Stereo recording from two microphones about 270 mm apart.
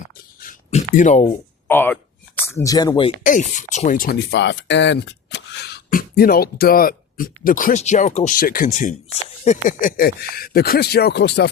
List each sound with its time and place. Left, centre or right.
0.3 s a sound: left
1.6 s speech: centre
3.2 s speech: left